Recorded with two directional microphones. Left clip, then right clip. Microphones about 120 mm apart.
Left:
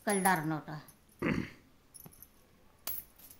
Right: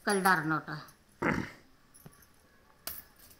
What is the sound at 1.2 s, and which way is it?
Dog, 30° left (ahead or behind).